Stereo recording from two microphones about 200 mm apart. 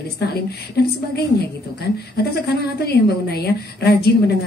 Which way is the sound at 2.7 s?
55° left (ahead or behind).